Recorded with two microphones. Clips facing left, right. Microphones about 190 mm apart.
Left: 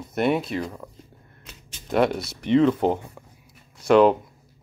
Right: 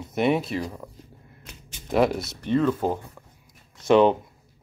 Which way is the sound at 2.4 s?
20° left (ahead or behind).